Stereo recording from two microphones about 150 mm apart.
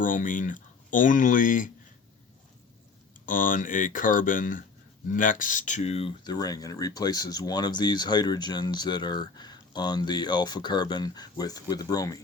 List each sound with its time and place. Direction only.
0.0 s speech: 60° left (ahead or behind)
3.2 s speech: 60° left (ahead or behind); by 6.1 s 45° left (ahead or behind)
6.2 s speech: 25° left (ahead or behind)